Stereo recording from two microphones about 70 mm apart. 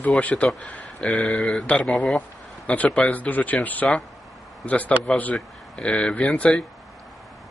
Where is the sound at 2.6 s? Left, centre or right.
Centre.